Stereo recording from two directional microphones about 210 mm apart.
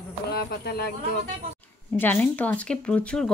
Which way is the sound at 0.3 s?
50° left (ahead or behind).